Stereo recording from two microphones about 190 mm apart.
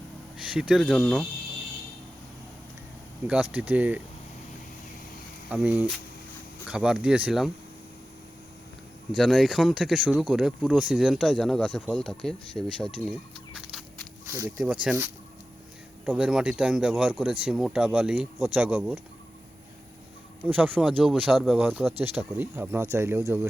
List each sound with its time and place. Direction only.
0.4 s speech: 5° right (ahead or behind)
3.2 s speech: 5° right (ahead or behind)
5.5 s speech: 5° right (ahead or behind)
9.1 s speech: centre (ahead or behind)
13.6 s a sound: centre (ahead or behind)
14.3 s speech: 20° right (ahead or behind)
14.6 s speech: 5° right (ahead or behind)
16.0 s speech: 5° right (ahead or behind)
20.5 s speech: 10° right (ahead or behind)